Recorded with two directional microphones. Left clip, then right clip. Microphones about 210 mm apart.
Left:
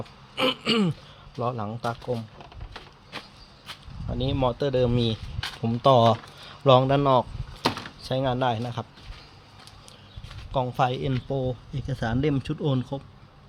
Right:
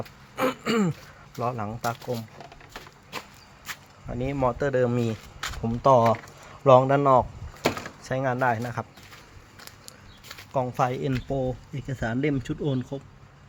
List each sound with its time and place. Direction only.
0.3 s throat clearing: 5° left (ahead or behind)
1.4 s speech: centre (ahead or behind)
3.7 s a sound: 30° right (ahead or behind)
4.1 s speech: 5° left (ahead or behind)
10.5 s speech: 5° left (ahead or behind)